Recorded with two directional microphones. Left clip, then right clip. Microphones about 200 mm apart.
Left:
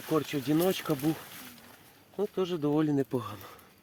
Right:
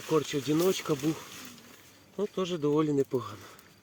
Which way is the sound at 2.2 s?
30° left (ahead or behind).